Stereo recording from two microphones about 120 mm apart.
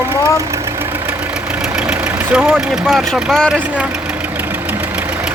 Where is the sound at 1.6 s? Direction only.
10° right (ahead or behind).